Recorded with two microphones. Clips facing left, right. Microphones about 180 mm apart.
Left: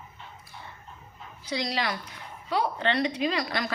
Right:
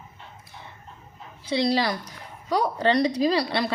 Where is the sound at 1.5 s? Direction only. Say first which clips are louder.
Right 7 dB; 30° right (ahead or behind).